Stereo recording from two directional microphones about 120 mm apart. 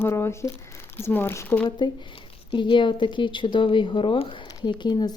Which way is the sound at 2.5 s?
45° left (ahead or behind).